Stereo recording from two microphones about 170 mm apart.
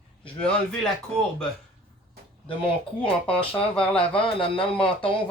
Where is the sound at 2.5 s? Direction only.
30° left (ahead or behind).